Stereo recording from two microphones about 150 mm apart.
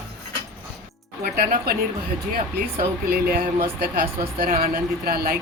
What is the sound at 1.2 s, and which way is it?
Speech, 70° right (ahead or behind).